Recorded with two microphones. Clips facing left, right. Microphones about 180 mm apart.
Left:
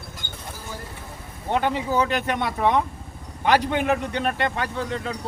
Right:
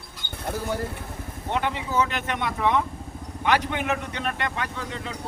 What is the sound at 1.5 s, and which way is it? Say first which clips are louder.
Speech: left 4 dB; 40° left (ahead or behind).